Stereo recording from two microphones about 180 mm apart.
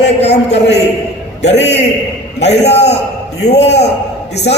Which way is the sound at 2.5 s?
35° left (ahead or behind).